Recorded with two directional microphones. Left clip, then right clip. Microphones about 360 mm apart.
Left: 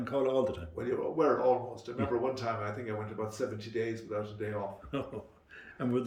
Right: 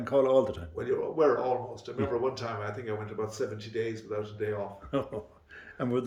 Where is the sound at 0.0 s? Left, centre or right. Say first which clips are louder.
Right 6 dB; centre.